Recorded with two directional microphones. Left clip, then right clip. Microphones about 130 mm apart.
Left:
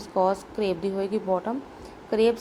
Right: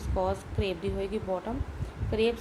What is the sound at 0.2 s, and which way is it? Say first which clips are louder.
A woman's voice: left 7 dB; 40° left (ahead or behind).